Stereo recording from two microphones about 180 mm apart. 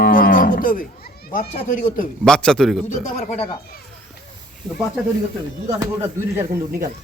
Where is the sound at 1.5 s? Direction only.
45° left (ahead or behind).